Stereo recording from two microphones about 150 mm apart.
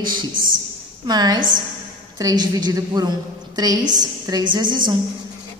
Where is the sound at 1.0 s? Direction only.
25° right (ahead or behind).